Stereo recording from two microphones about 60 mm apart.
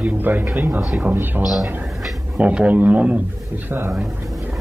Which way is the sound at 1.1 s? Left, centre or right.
Right.